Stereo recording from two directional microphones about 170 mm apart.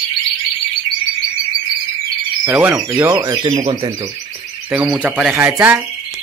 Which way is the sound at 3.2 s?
25° right (ahead or behind).